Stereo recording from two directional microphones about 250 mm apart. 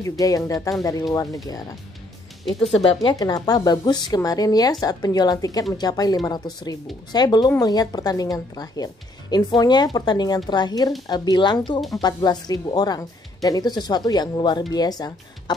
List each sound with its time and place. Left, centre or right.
0.2 s speech: centre
2.7 s speech: left